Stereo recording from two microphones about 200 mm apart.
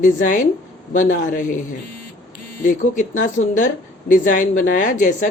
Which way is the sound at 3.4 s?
40° left (ahead or behind).